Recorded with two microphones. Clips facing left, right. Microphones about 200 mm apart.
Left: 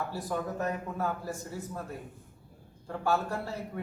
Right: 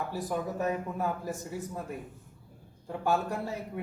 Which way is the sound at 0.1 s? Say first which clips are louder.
Right 1 dB; 15° right (ahead or behind).